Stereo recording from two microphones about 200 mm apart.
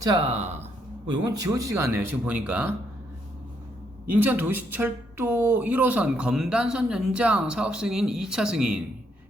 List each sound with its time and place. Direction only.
0.0 s speech: 25° right (ahead or behind)
1.0 s speech: 20° right (ahead or behind)
4.1 s speech: 10° right (ahead or behind)